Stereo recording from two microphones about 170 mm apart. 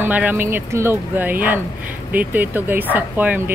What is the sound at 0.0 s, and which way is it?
Speech, 10° right (ahead or behind).